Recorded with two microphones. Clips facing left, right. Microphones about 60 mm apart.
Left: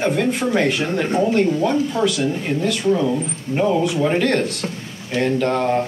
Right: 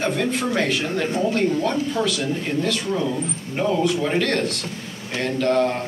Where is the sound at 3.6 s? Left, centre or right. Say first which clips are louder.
Left 3 dB; centre.